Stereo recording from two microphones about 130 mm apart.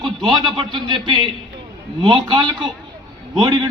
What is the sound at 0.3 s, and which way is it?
A man's voice, 35° right (ahead or behind).